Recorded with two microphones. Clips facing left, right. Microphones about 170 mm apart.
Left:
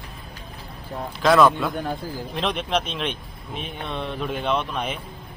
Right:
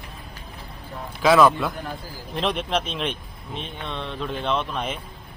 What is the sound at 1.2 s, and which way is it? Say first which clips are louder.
Speech: even; centre (ahead or behind).